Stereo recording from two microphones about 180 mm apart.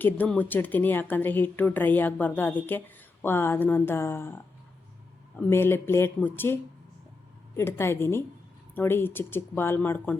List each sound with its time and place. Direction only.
0.0 s speech: 10° left (ahead or behind)
5.5 s speech: 15° left (ahead or behind)